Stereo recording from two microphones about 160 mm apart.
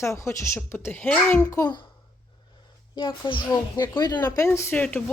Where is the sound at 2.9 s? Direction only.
30° left (ahead or behind).